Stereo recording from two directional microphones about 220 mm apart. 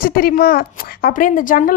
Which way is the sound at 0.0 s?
40° left (ahead or behind).